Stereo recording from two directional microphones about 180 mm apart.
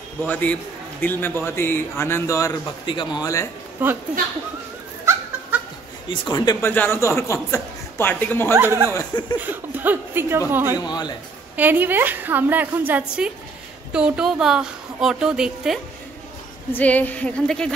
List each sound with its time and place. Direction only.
0.2 s speech: 10° left (ahead or behind)
3.8 s a woman's voice: 10° right (ahead or behind)
6.0 s speech: 25° left (ahead or behind)
8.5 s a woman's voice: 15° right (ahead or behind)
8.9 s a sound: 25° left (ahead or behind)
9.4 s a woman's voice: 10° right (ahead or behind)
10.9 s a sound: 25° left (ahead or behind)
11.5 s a woman's voice: 10° right (ahead or behind)
16.7 s speech: 10° left (ahead or behind)